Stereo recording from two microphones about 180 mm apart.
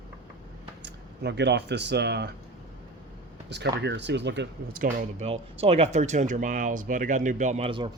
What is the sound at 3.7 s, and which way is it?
Speech, 75° right (ahead or behind).